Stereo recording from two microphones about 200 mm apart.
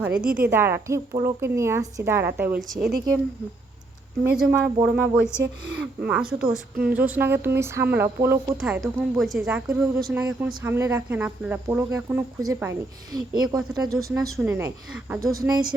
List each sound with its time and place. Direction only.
0.0 s speech: 5° right (ahead or behind)
4.4 s speech: 5° right (ahead or behind); by 15.7 s 20° right (ahead or behind)